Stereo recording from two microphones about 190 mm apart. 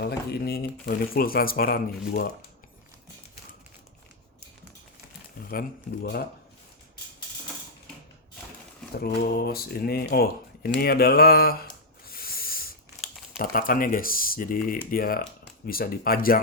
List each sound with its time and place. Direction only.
0.0 s speech: 55° left (ahead or behind)
5.5 s speech: 55° left (ahead or behind)
9.0 s speech: 55° left (ahead or behind)
12.0 s a sound: 50° left (ahead or behind)
13.4 s speech: 50° left (ahead or behind)